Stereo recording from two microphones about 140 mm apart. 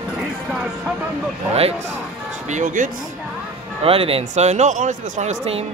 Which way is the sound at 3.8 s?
45° right (ahead or behind).